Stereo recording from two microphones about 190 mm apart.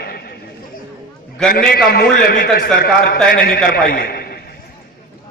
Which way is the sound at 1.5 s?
55° left (ahead or behind).